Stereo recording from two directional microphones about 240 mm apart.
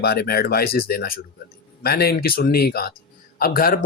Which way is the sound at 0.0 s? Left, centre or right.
Left.